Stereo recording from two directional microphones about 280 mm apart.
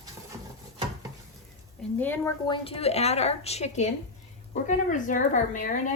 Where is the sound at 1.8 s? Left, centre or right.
Centre.